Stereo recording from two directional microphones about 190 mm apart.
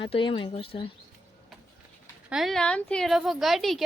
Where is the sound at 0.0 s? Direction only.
25° left (ahead or behind).